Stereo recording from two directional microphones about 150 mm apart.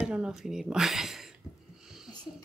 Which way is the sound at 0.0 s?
5° right (ahead or behind).